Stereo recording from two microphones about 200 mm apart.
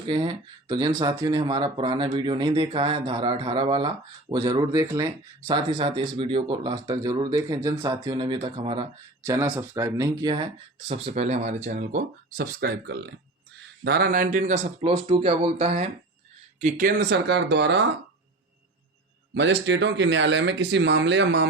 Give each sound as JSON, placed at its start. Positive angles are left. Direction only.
{"t": 0.1, "sound": "speech", "side_deg": -20}
{"t": 9.2, "sound": "speech", "side_deg": -15}
{"t": 12.5, "sound": "speech", "side_deg": -55}
{"t": 16.6, "sound": "speech", "side_deg": -40}
{"t": 19.3, "sound": "speech", "side_deg": -60}